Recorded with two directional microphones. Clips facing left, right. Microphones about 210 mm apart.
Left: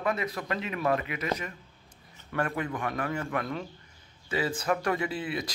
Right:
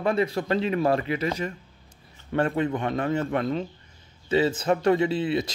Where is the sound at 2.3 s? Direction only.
25° right (ahead or behind).